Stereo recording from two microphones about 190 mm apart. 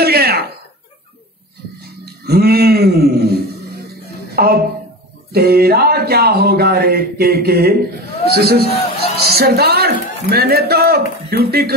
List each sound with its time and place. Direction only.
0.0 s a sound: 55° right (ahead or behind)
2.2 s speech: 55° right (ahead or behind)
8.6 s a man's voice: 30° left (ahead or behind)
9.1 s a man's voice: 55° right (ahead or behind)